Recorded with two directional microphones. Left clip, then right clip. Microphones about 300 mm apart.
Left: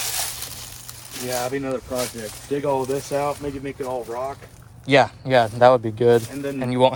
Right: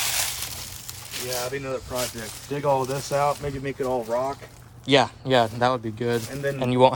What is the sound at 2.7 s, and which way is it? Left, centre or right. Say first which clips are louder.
Speech: left 1 dB; right.